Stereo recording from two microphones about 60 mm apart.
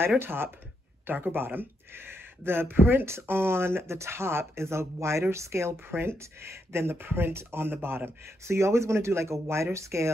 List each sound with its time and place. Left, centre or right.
0.2 s speech: right